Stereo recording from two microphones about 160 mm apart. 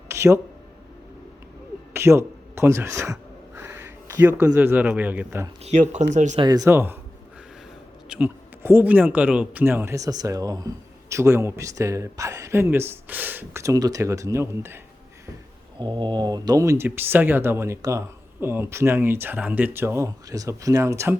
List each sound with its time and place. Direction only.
0.1 s a sound: 20° right (ahead or behind)
1.9 s gasp: 15° right (ahead or behind)
4.5 s speech: 10° right (ahead or behind)
5.6 s speech: 45° right (ahead or behind)
6.3 s speech: 25° right (ahead or behind)
8.1 s speech: 15° right (ahead or behind)
15.8 s speech: 30° right (ahead or behind)